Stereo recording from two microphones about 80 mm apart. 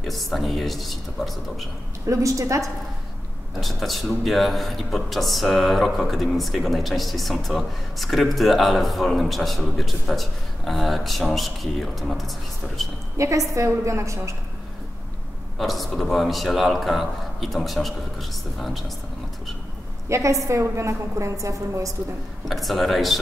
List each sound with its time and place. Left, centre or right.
0.0 s speech: centre
2.0 s a woman's voice: right
3.6 s speech: centre
13.2 s a woman's voice: right
15.5 s speech: centre
20.1 s a woman's voice: right
22.4 s speech: centre